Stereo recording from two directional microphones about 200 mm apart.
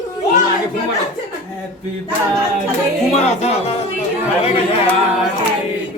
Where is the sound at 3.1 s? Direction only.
30° left (ahead or behind).